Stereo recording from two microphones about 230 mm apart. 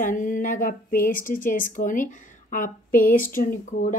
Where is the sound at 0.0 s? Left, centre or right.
Left.